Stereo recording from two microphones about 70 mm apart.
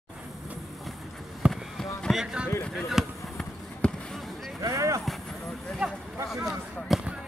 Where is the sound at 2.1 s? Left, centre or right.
Centre.